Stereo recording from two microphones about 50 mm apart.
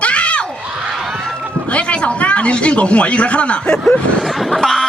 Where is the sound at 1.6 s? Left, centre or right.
Left.